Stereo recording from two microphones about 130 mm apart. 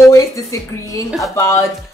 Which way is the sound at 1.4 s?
20° left (ahead or behind).